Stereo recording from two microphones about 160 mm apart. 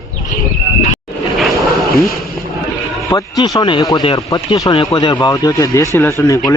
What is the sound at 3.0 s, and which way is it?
A man's voice, 20° left (ahead or behind).